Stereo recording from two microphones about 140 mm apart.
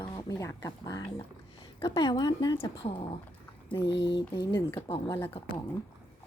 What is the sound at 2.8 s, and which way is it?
Speech, 35° left (ahead or behind).